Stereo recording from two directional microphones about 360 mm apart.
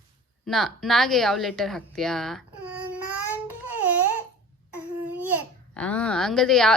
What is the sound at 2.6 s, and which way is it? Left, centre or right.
Baby cry, left.